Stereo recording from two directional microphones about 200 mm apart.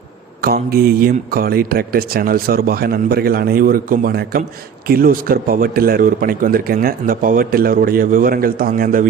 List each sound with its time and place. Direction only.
0.4 s a man's voice: 50° right (ahead or behind)